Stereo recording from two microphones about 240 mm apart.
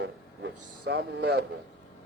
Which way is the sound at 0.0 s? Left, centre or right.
Right.